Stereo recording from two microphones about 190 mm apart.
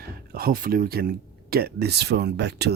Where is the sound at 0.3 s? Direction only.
50° right (ahead or behind).